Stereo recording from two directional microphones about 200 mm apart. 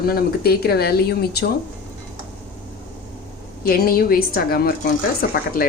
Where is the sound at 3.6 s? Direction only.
50° left (ahead or behind).